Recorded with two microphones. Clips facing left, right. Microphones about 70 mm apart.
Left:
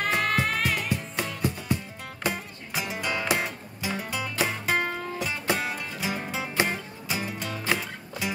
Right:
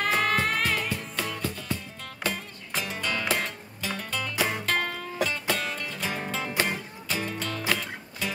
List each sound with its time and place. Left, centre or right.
0.0 s music: centre
0.8 s music: centre